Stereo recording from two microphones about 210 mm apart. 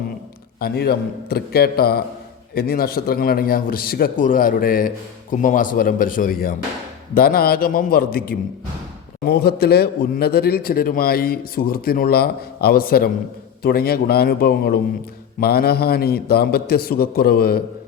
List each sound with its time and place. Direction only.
0.6 s a man's voice: 50° left (ahead or behind)